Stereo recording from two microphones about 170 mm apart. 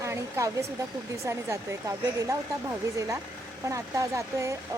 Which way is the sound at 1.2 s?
15° right (ahead or behind).